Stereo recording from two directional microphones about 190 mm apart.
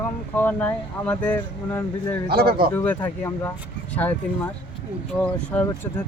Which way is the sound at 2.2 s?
55° right (ahead or behind).